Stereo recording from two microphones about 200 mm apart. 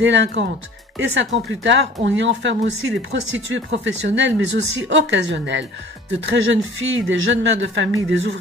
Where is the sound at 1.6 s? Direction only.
60° right (ahead or behind).